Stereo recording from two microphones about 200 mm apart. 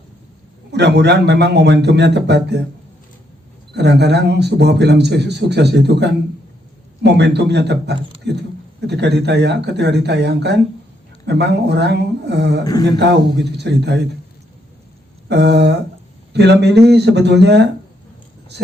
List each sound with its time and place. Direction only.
0.7 s a man's voice: 55° right (ahead or behind)
3.8 s a man's voice: 55° right (ahead or behind)
15.3 s a man's voice: 60° right (ahead or behind)